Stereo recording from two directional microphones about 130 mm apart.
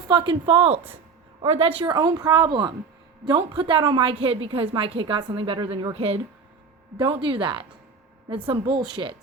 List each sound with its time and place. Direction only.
0.1 s a woman's voice: 40° right (ahead or behind)
4.1 s a woman's voice: 45° right (ahead or behind)
6.9 s a woman's voice: 40° right (ahead or behind)